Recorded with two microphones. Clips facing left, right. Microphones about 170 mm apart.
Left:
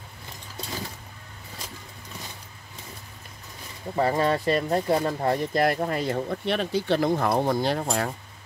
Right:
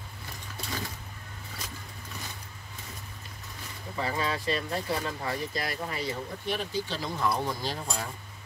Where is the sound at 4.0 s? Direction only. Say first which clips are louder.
Left 8 dB; 55° left (ahead or behind).